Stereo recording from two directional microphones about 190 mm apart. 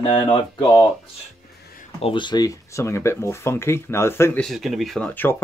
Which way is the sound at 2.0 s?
25° left (ahead or behind).